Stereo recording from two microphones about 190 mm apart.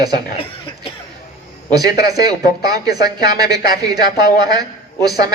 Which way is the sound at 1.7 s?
20° right (ahead or behind).